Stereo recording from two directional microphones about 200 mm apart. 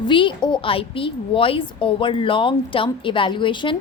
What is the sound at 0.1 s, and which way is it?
A woman's voice, 25° left (ahead or behind).